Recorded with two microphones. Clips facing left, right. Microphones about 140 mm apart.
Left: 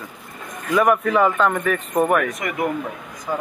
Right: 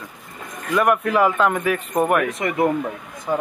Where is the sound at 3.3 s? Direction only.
15° right (ahead or behind).